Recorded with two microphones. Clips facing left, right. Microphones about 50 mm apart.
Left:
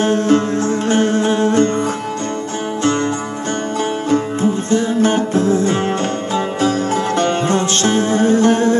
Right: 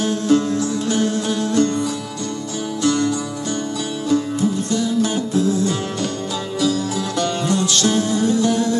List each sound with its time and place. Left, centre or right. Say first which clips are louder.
0.0 s music: left 3 dB; left
4.1 s music: left 1 dB; left